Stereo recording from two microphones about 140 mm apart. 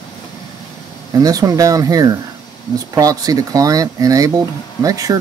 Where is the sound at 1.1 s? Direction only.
25° right (ahead or behind).